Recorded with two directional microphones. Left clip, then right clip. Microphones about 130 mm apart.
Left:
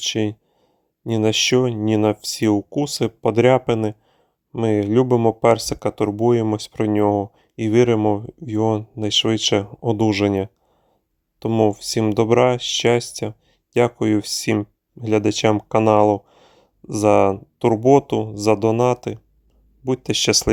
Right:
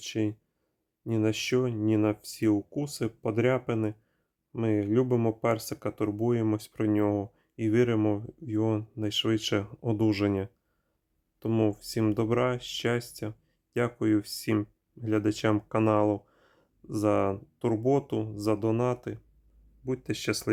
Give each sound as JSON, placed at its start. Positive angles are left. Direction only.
{"t": 0.0, "sound": "speech", "side_deg": 55}